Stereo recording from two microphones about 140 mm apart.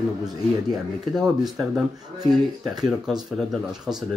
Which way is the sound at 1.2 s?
Centre (ahead or behind).